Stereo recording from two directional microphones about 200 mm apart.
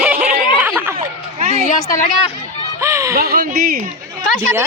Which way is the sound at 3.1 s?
45° right (ahead or behind).